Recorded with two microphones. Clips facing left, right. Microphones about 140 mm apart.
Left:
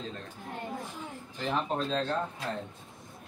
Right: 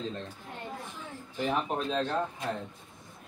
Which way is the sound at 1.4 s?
15° right (ahead or behind).